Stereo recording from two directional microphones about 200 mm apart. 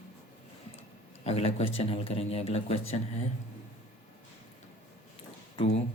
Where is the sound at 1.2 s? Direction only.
30° left (ahead or behind).